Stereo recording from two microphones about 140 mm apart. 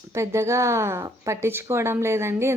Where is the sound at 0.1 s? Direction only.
20° right (ahead or behind).